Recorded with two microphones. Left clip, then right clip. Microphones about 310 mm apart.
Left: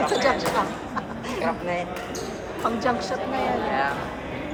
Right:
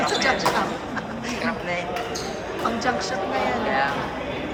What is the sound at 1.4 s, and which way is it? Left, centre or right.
Speech, centre.